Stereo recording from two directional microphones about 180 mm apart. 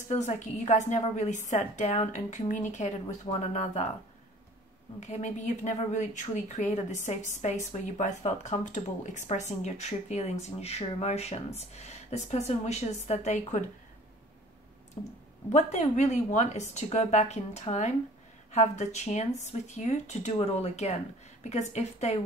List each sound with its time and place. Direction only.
0.1 s a woman's voice: 40° left (ahead or behind)
3.3 s speech: 30° left (ahead or behind)
5.0 s speech: 40° left (ahead or behind)
15.5 s speech: 40° left (ahead or behind)